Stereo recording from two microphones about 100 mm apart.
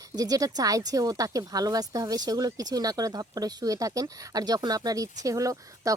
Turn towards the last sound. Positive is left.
turn(degrees=-35)  # may be behind; listen again after turning